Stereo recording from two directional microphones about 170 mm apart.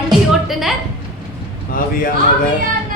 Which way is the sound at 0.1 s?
Centre (ahead or behind).